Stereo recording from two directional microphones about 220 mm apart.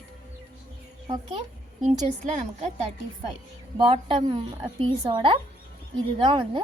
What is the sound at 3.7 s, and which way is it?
Speech, 20° right (ahead or behind).